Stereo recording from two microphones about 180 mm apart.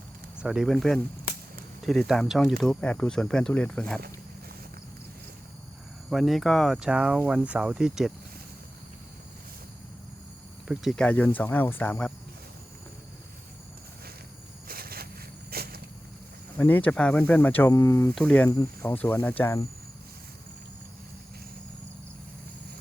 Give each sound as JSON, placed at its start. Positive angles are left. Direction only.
{"t": 0.3, "sound": "speech", "side_deg": -5}
{"t": 6.1, "sound": "speech", "side_deg": 0}
{"t": 10.7, "sound": "speech", "side_deg": 0}
{"t": 14.7, "sound": "a sound", "side_deg": -55}
{"t": 15.4, "sound": "vehicle", "side_deg": -60}
{"t": 16.6, "sound": "speech", "side_deg": 10}